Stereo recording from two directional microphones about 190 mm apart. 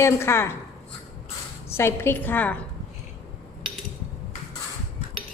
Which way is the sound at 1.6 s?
15° left (ahead or behind).